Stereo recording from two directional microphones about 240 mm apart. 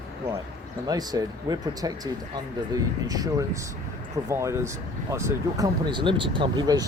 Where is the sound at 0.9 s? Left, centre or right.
Centre.